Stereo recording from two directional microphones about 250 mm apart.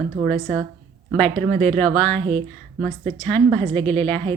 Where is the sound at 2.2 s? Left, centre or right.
Right.